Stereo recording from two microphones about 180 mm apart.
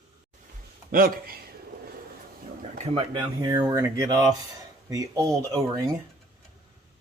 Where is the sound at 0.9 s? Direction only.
55° right (ahead or behind).